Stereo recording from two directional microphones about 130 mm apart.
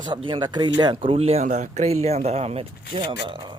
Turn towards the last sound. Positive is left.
turn(degrees=-35)  # may be behind; listen again after turning